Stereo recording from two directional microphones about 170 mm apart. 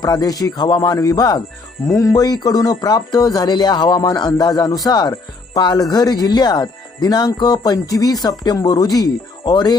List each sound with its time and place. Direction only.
0.0 s speech: 20° left (ahead or behind)